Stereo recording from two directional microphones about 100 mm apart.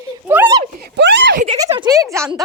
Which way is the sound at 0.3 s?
20° right (ahead or behind).